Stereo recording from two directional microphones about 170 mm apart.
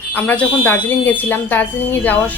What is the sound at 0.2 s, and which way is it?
Speech, 10° left (ahead or behind).